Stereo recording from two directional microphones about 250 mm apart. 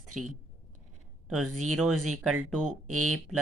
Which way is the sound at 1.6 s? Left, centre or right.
Centre.